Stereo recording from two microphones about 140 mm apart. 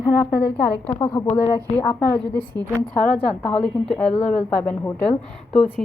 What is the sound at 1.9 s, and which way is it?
Speech, 15° left (ahead or behind).